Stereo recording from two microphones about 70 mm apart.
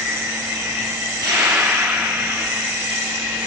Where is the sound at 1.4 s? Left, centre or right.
Right.